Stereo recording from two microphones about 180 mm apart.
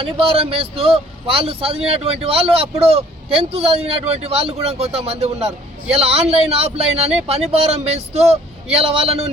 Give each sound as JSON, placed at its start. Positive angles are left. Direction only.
{"t": 0.0, "sound": "a man's voice", "side_deg": -30}